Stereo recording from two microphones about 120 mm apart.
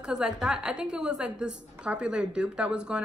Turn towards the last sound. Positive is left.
turn(degrees=-10)  # may be behind; listen again after turning